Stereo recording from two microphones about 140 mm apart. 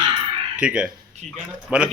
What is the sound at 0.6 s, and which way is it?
A man's voice, 5° right (ahead or behind).